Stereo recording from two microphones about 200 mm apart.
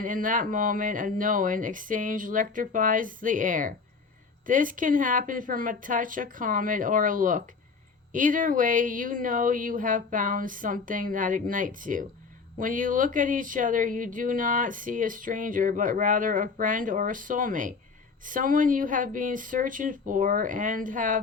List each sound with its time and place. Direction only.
0.0 s speech: 45° right (ahead or behind)